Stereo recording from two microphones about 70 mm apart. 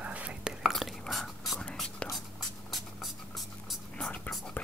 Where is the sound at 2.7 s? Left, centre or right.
Centre.